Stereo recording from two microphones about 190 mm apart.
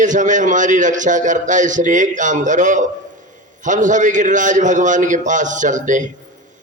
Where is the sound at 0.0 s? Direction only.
40° right (ahead or behind).